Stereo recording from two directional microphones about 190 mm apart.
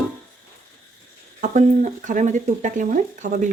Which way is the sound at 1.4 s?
40° right (ahead or behind).